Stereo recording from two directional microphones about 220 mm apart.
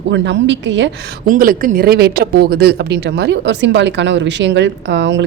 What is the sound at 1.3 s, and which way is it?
Speech, 40° right (ahead or behind).